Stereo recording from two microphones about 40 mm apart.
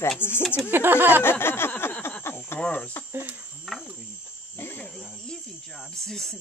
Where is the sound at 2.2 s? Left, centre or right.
Left.